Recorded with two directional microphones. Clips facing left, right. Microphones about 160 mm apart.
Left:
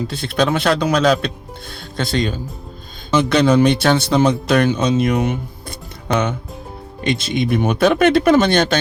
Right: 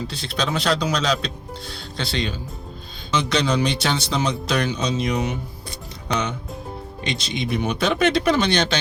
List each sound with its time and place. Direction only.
0.1 s speech: 50° left (ahead or behind)